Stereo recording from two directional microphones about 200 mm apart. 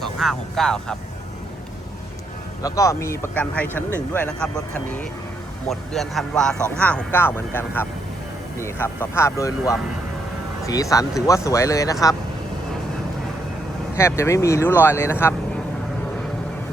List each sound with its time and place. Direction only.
0.0 s speech: centre (ahead or behind)
2.6 s speech: 15° left (ahead or behind)
13.9 s speech: 15° left (ahead or behind)